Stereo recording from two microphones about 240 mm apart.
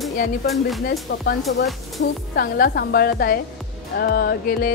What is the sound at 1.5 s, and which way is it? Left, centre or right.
A woman's voice, left.